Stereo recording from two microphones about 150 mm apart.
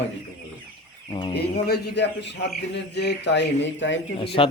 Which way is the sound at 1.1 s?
35° left (ahead or behind).